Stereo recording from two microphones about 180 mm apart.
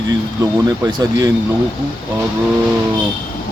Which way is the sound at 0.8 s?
20° right (ahead or behind).